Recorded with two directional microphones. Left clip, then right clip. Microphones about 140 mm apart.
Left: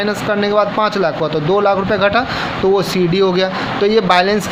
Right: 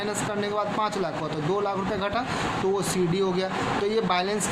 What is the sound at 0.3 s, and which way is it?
Speech, 40° left (ahead or behind).